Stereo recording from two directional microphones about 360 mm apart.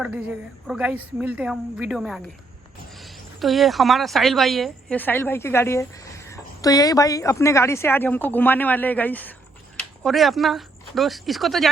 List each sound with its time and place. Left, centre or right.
0.0 s speech: centre